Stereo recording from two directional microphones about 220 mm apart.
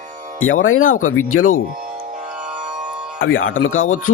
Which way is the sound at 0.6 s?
60° left (ahead or behind).